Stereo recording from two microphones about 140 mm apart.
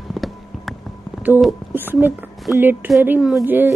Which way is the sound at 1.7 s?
15° right (ahead or behind).